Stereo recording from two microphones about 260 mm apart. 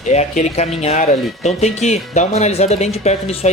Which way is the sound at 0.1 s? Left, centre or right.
Left.